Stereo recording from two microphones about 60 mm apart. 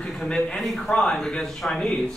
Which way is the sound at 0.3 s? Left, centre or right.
Centre.